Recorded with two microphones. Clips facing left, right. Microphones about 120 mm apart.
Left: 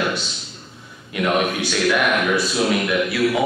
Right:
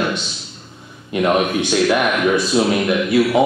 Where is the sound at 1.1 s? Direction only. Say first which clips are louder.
Right 4 dB; 30° right (ahead or behind).